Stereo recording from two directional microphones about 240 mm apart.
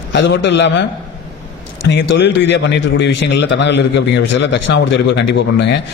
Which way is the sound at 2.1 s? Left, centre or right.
Left.